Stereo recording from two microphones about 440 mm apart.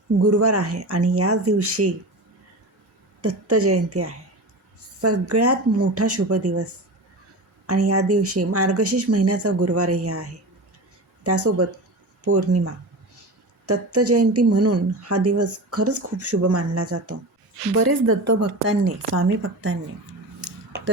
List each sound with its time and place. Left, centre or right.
0.2 s speech: right
3.2 s speech: right
7.7 s speech: right